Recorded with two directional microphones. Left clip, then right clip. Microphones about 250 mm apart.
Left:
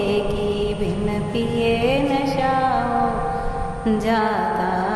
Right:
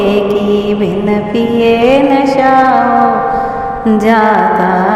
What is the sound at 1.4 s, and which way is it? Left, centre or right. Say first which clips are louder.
Music: right 10 dB; right.